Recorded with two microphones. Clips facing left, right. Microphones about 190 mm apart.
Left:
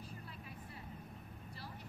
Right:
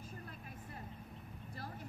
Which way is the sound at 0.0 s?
45° right (ahead or behind).